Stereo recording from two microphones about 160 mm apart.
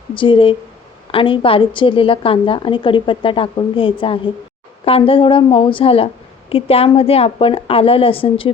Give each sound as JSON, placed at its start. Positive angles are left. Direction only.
{"t": 0.1, "sound": "a woman's voice", "side_deg": 30}